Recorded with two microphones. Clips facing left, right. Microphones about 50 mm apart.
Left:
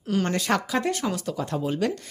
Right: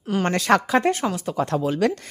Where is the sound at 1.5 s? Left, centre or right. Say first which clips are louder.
Right 4 dB; right.